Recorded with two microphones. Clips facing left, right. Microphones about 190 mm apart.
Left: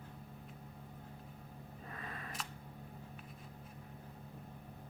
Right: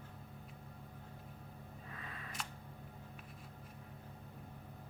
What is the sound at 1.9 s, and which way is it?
Camera, 45° left (ahead or behind).